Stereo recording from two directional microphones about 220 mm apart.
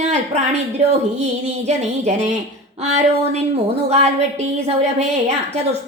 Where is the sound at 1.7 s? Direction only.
30° right (ahead or behind).